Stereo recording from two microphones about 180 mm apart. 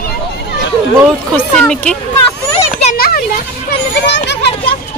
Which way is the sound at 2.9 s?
55° left (ahead or behind).